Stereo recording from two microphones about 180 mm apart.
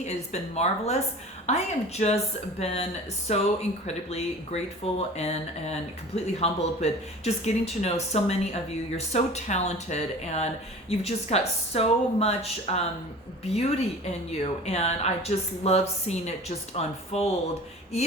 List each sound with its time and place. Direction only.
0.0 s speech: 40° left (ahead or behind)